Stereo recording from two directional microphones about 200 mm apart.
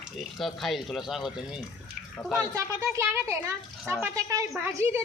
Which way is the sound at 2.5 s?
15° right (ahead or behind).